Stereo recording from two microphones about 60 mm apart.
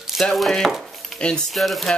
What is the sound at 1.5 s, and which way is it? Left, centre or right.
Speech, centre.